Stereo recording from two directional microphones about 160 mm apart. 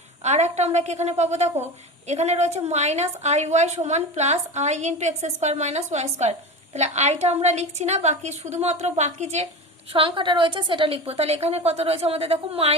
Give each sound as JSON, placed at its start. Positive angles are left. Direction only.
{"t": 0.2, "sound": "a woman's voice", "side_deg": -45}
{"t": 9.9, "sound": "a woman's voice", "side_deg": -30}